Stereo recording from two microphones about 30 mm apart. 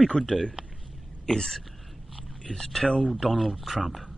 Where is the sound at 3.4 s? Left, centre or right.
Centre.